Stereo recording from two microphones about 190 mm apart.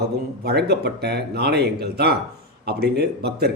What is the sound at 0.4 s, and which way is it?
A man's voice, 60° right (ahead or behind).